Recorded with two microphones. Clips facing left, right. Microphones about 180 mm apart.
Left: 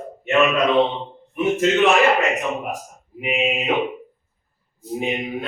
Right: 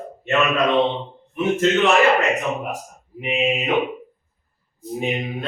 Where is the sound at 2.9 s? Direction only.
15° left (ahead or behind).